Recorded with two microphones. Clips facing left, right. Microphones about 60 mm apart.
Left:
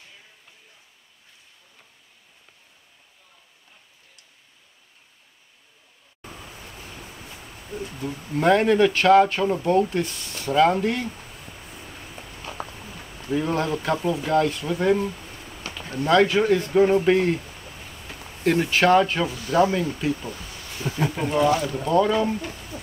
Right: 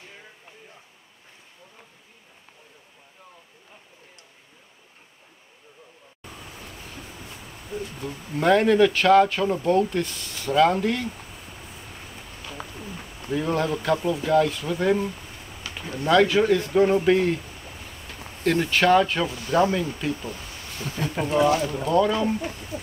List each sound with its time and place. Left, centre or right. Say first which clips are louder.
7.7 s speech: left 1 dB; centre
12.7 s a sound: right 3 dB; centre
13.3 s speech: left 1 dB; centre
18.4 s speech: left 1 dB; centre
20.2 s a sound: even; left
21.1 s speech: right 1 dB; centre
22.4 s speech: right 3 dB; centre